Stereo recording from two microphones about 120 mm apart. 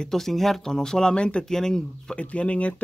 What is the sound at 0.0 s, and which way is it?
Speech, 5° left (ahead or behind).